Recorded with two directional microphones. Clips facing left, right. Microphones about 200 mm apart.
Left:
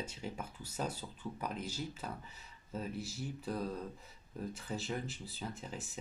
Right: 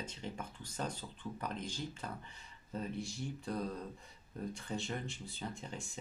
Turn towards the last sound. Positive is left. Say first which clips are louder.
# even
turn(degrees=5)  # may be behind; listen again after turning